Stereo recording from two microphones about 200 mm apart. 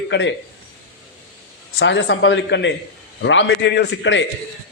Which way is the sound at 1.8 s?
60° left (ahead or behind).